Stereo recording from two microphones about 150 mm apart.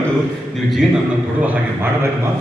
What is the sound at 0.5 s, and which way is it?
Speech, centre (ahead or behind).